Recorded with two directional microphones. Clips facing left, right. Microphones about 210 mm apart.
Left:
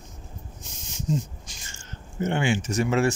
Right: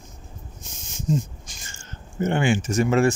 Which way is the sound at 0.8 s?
50° right (ahead or behind).